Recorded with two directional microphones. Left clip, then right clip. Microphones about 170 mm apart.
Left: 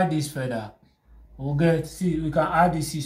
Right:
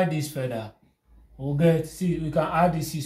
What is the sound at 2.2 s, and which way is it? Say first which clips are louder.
Speech: left 2 dB; 45° right (ahead or behind).